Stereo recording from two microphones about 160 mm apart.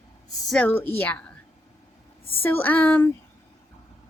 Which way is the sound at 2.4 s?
10° left (ahead or behind).